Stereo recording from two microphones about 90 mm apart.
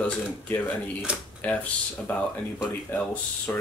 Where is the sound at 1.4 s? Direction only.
15° left (ahead or behind).